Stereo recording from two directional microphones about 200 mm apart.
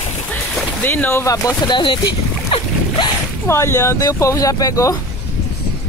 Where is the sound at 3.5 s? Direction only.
15° left (ahead or behind).